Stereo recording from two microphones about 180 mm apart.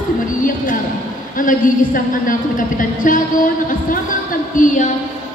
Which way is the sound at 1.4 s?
50° left (ahead or behind).